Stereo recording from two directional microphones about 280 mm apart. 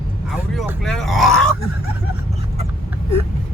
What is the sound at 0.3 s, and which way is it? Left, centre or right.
Grunt, centre.